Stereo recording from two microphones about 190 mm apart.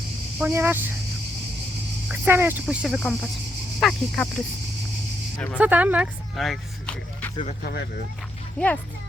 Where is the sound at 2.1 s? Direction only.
10° right (ahead or behind).